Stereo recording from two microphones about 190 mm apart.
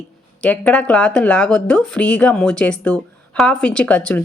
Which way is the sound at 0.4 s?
5° left (ahead or behind).